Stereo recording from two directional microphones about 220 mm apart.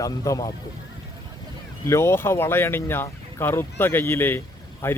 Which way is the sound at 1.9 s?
10° left (ahead or behind).